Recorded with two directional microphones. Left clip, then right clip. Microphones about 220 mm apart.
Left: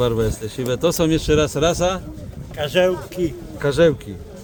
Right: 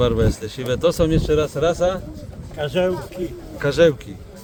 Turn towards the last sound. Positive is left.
turn(degrees=5)  # may be behind; listen again after turning